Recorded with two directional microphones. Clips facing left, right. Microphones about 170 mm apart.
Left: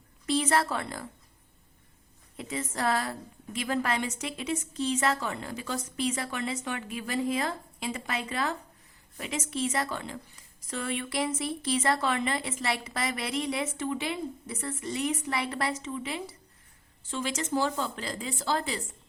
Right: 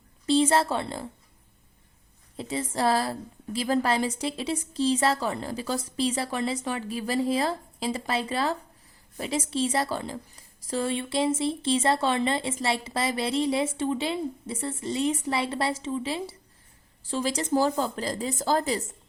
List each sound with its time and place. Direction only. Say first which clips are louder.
0.3 s a woman's voice: right 5 dB; 30° right (ahead or behind)
2.3 s a woman's voice: right 4 dB; 30° right (ahead or behind)